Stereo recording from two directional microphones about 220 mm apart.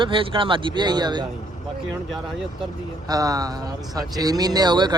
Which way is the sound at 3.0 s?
15° right (ahead or behind).